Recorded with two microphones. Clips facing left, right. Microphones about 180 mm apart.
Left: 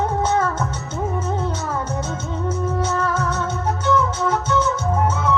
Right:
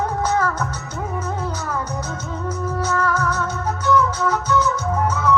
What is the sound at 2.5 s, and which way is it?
Music, 25° left (ahead or behind).